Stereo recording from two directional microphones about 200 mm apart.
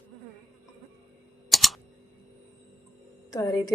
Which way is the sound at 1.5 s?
Centre (ahead or behind).